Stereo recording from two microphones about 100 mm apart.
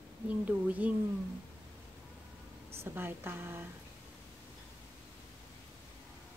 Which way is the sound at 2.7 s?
25° right (ahead or behind).